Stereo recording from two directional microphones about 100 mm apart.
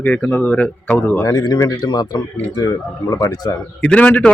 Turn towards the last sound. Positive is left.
turn(degrees=15)  # may be behind; listen again after turning